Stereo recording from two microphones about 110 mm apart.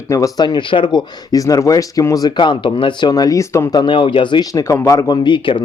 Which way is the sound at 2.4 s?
45° left (ahead or behind).